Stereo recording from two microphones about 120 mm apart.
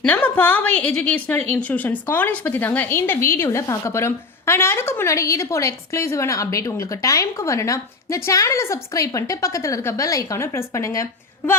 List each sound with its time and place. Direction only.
0.0 s a woman's voice: 15° left (ahead or behind)